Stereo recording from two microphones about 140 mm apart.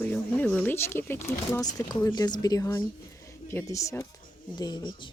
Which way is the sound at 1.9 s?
25° left (ahead or behind).